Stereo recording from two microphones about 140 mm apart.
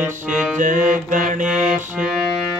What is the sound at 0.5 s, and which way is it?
Mantra, 65° right (ahead or behind).